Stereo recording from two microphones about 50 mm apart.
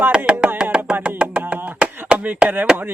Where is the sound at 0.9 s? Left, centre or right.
Right.